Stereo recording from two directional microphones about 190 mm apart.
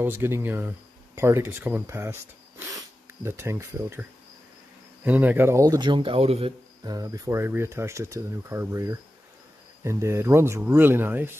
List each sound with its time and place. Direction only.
0.0 s speech: 10° right (ahead or behind)
5.0 s speech: 10° right (ahead or behind); by 6.5 s 30° right (ahead or behind)
6.8 s speech: 20° right (ahead or behind)